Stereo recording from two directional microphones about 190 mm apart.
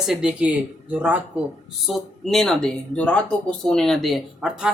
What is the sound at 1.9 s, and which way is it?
Speech, centre (ahead or behind).